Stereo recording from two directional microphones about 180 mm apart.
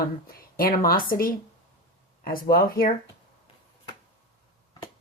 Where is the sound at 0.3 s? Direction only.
55° left (ahead or behind).